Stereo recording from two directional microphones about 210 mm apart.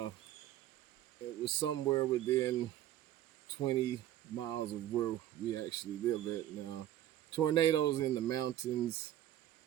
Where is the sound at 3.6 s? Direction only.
20° left (ahead or behind).